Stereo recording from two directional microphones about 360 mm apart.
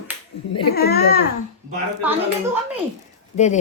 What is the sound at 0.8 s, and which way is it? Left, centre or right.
Speech, left.